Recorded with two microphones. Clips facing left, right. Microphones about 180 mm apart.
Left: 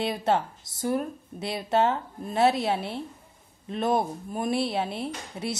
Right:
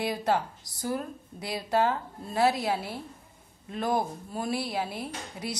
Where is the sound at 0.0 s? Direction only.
25° left (ahead or behind).